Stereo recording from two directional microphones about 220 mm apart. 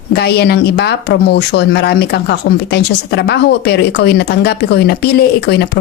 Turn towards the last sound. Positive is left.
turn(degrees=45)  # may be behind; listen again after turning